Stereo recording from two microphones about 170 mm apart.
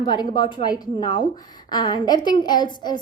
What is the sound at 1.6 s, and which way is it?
A woman's voice, 25° left (ahead or behind).